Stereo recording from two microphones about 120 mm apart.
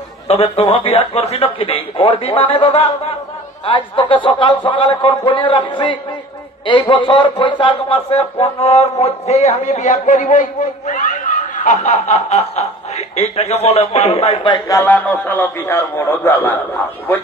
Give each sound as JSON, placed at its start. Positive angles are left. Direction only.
{"t": 0.3, "sound": "a man's voice", "side_deg": 55}
{"t": 14.7, "sound": "a man's voice", "side_deg": 15}